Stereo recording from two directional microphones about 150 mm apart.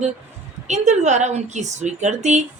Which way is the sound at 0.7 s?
50° right (ahead or behind).